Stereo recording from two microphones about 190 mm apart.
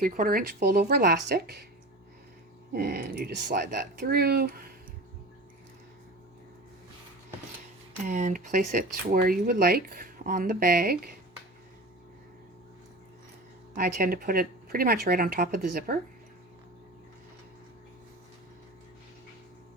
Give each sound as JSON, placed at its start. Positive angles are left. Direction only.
{"t": 0.0, "sound": "speech", "side_deg": -50}
{"t": 2.7, "sound": "speech", "side_deg": -60}
{"t": 8.0, "sound": "speech", "side_deg": -40}
{"t": 13.7, "sound": "speech", "side_deg": -50}